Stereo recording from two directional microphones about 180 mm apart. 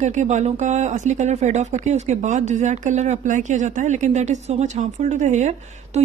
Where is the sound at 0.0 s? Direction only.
40° right (ahead or behind).